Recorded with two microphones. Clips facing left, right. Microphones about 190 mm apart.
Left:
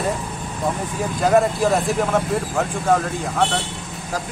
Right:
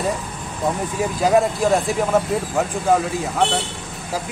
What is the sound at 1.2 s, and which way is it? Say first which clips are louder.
Speech: even; centre (ahead or behind).